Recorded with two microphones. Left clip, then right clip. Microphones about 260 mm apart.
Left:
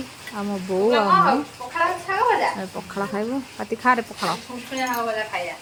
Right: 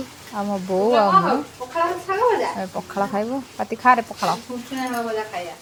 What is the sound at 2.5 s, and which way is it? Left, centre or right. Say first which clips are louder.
Speech: right 4 dB; centre.